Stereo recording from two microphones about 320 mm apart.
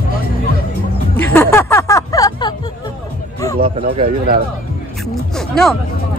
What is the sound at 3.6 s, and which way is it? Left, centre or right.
Speech, centre.